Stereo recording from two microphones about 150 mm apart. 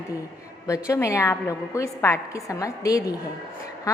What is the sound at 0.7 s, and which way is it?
A woman's voice, 20° left (ahead or behind).